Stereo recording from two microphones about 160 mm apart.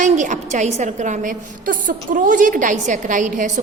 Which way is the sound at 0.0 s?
50° right (ahead or behind).